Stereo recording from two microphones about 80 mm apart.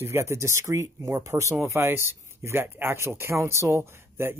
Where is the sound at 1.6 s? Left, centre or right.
Right.